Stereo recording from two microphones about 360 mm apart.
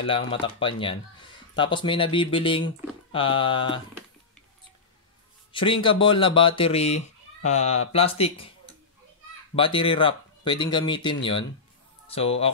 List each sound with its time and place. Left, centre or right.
0.0 s speech: centre
5.5 s speech: centre
9.6 s speech: centre